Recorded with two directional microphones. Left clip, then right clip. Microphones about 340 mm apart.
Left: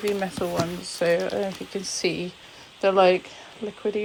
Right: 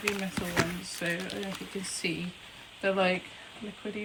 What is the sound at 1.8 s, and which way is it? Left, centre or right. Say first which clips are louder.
Speech: left 8 dB; centre.